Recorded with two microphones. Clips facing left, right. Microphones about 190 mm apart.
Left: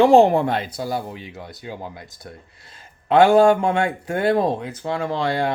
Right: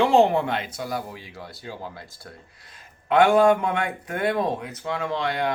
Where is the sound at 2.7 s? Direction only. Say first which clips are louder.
Left 4 dB; 30° left (ahead or behind).